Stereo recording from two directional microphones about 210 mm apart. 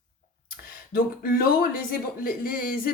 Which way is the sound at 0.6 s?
45° left (ahead or behind).